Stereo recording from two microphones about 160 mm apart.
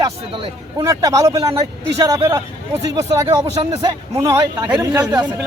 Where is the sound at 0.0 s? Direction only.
35° right (ahead or behind).